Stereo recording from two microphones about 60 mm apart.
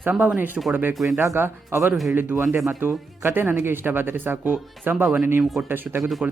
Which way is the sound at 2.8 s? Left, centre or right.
Right.